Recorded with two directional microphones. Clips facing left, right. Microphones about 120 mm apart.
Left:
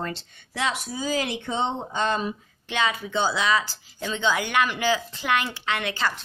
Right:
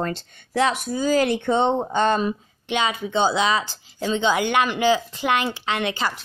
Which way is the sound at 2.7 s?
20° right (ahead or behind).